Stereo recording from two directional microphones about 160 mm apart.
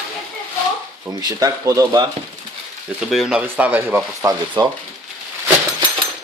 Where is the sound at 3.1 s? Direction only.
5° right (ahead or behind).